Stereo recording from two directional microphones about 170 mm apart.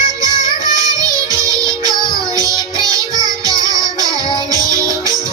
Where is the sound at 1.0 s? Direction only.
20° right (ahead or behind).